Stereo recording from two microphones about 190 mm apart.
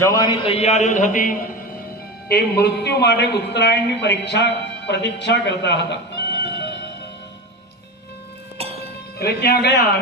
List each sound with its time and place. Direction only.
0.0 s a man's voice: 20° left (ahead or behind); by 1.6 s 45° left (ahead or behind)
2.3 s a man's voice: 60° left (ahead or behind)
8.5 s music: 30° right (ahead or behind)
9.1 s a man's voice: 60° left (ahead or behind)